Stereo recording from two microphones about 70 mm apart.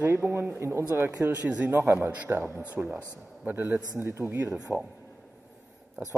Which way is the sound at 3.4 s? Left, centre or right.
Right.